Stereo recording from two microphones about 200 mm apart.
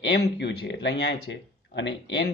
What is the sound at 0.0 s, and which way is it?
Speech, 60° left (ahead or behind).